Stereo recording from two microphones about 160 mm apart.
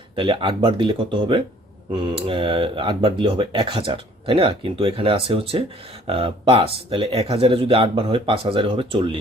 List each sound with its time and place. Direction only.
0.2 s speech: 30° right (ahead or behind)